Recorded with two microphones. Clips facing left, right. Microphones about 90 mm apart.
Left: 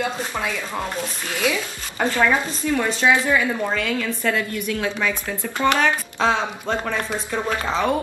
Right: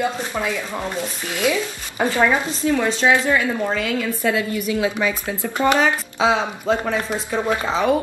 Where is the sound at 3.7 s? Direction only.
5° right (ahead or behind).